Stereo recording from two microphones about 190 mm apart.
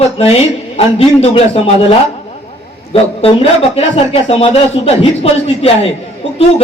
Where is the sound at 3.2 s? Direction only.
30° left (ahead or behind).